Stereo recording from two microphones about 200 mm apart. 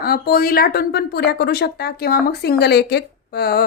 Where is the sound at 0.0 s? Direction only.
50° left (ahead or behind).